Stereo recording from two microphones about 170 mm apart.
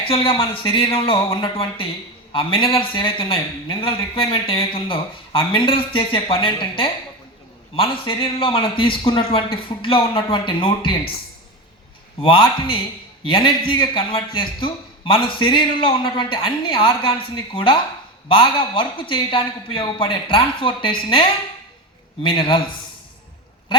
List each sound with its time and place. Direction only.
0.3 s a man's voice: 30° left (ahead or behind)
12.2 s a man's voice: 30° left (ahead or behind)